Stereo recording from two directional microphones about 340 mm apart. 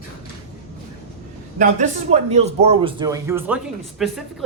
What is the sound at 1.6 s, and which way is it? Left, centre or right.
A man's voice, centre.